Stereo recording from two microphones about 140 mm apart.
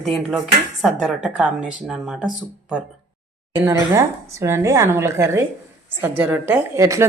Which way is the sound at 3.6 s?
20° right (ahead or behind).